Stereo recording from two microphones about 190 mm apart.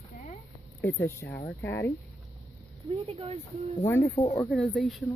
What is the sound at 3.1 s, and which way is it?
Speech, 35° right (ahead or behind).